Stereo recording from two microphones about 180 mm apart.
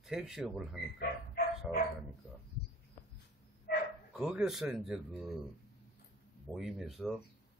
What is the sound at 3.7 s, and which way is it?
Bow-wow, 60° left (ahead or behind).